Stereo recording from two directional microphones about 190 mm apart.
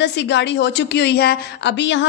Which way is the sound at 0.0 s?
65° left (ahead or behind).